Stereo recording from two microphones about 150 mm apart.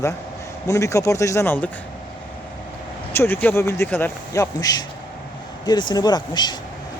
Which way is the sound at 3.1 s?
15° left (ahead or behind).